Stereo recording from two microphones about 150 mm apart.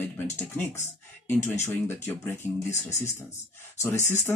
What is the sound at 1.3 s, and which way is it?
Speech, 15° left (ahead or behind).